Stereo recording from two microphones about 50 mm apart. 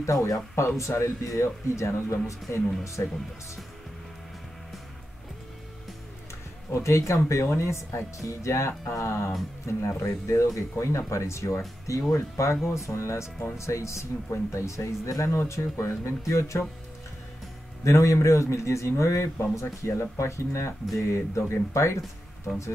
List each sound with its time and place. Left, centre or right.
0.0 s speech: left
2.8 s speech: left
6.7 s speech: left
7.4 s speech: left
9.7 s speech: left
12.1 s speech: left
13.6 s speech: left
17.8 s speech: left
21.0 s speech: left